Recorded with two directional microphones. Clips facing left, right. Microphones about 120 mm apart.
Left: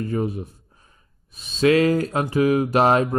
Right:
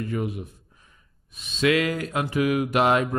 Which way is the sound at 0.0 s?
35° left (ahead or behind).